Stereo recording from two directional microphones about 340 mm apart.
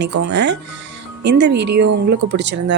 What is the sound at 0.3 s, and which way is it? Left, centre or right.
A woman's voice, right.